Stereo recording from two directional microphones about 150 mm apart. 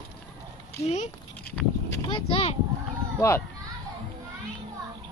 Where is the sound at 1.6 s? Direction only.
5° left (ahead or behind).